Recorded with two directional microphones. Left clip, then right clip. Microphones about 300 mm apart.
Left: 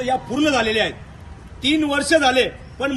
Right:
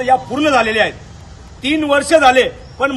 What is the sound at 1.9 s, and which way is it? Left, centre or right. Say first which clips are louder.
Speech: right 10 dB; centre.